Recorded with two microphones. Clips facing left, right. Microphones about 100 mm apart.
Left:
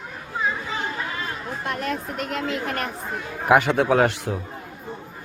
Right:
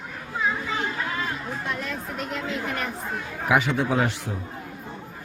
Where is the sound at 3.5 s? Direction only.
60° left (ahead or behind).